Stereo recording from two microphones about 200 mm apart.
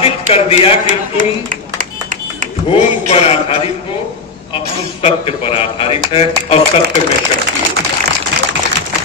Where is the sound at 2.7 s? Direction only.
30° left (ahead or behind).